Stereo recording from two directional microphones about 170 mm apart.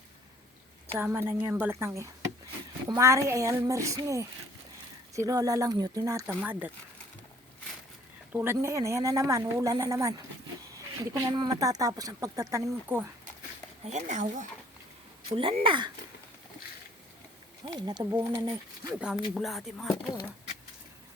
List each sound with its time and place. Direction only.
0.9 s a woman's voice: 10° right (ahead or behind)
8.3 s a woman's voice: 15° right (ahead or behind)
13.8 s speech: 45° right (ahead or behind)
15.3 s speech: 30° right (ahead or behind)
17.7 s a woman's voice: 25° right (ahead or behind)
18.9 s speech: 5° right (ahead or behind)
19.9 s speech: 15° left (ahead or behind)